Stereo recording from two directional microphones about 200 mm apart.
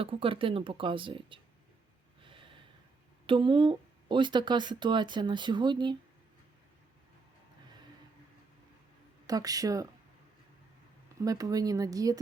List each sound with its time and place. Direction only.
0.0 s speech: 25° right (ahead or behind)
3.2 s speech: 25° right (ahead or behind)
9.2 s speech: 20° right (ahead or behind)
11.2 s speech: 15° right (ahead or behind)